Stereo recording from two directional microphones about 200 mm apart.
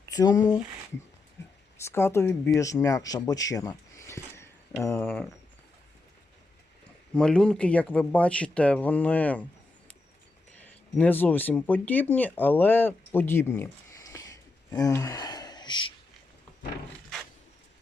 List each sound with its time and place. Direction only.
0.1 s speech: 20° left (ahead or behind)
1.8 s speech: 10° left (ahead or behind)
7.1 s speech: 5° left (ahead or behind)
10.9 s speech: 10° left (ahead or behind)